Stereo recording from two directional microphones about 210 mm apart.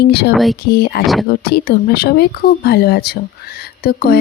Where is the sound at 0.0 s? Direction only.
50° left (ahead or behind).